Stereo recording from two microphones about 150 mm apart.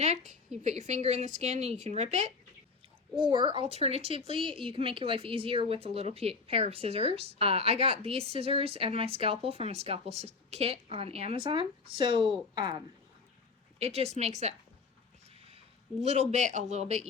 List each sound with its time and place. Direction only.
0.0 s a woman's voice: 50° right (ahead or behind)
3.2 s a woman's voice: 35° right (ahead or behind)
13.7 s a woman's voice: 45° right (ahead or behind)